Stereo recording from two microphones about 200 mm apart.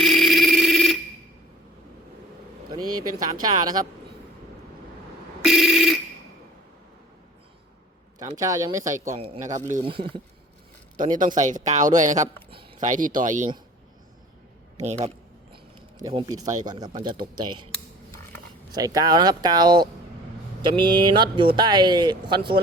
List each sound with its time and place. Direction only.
0.0 s telephone: centre (ahead or behind)
2.6 s a sound: 20° right (ahead or behind)
3.0 s speech: 20° right (ahead or behind)
5.5 s a sound: centre (ahead or behind)
8.4 s speech: 15° right (ahead or behind)
9.0 s speech: 30° right (ahead or behind)
9.7 s speech: 25° right (ahead or behind)
11.2 s speech: 40° right (ahead or behind)
14.8 s speech: 35° right (ahead or behind)
16.0 s speech: 20° right (ahead or behind)
18.7 s speech: 20° right (ahead or behind)